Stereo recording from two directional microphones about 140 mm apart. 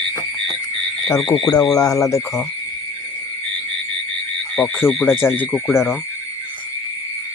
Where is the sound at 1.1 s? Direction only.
5° left (ahead or behind).